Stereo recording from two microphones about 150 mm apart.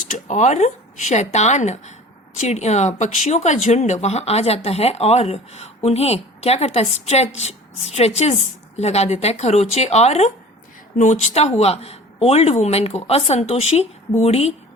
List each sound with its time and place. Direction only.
0.1 s speech: 50° left (ahead or behind)